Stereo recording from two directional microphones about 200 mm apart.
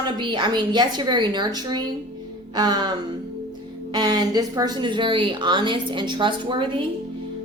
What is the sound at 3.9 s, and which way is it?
A woman's voice, 20° right (ahead or behind).